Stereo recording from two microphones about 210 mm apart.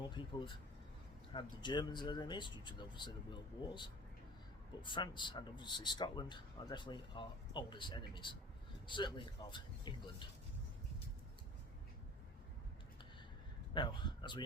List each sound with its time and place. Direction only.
0.1 s a man's voice: 20° left (ahead or behind)
4.8 s a man's voice: 20° left (ahead or behind)
13.7 s a man's voice: 20° left (ahead or behind)